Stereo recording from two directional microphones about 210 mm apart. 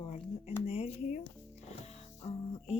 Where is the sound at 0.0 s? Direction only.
30° left (ahead or behind).